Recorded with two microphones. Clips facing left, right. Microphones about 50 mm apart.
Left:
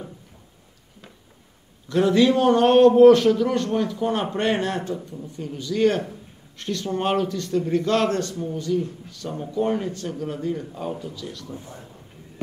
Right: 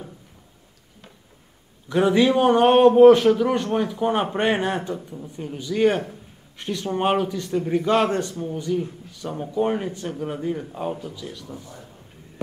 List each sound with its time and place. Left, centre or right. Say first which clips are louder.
1.9 s a man's voice: even; centre
11.5 s a man's voice: left 1 dB; left